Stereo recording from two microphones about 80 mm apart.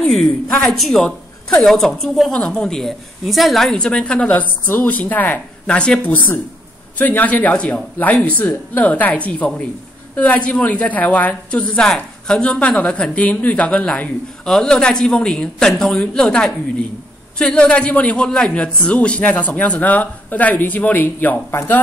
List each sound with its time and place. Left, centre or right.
0.0 s a woman's voice: centre
2.3 s a woman's voice: centre